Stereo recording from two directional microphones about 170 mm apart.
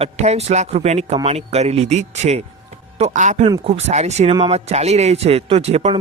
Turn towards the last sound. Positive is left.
turn(degrees=-35)  # may be behind; listen again after turning